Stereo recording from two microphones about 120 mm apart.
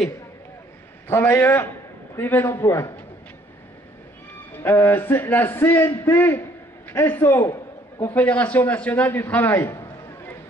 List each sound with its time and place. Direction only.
1.0 s a man's voice: 20° left (ahead or behind)
4.5 s a man's voice: 20° left (ahead or behind)